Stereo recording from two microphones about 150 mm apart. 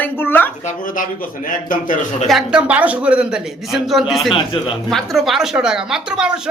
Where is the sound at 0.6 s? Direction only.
65° left (ahead or behind).